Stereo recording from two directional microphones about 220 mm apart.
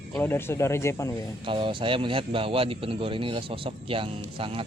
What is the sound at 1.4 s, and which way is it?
A man's voice, 20° right (ahead or behind).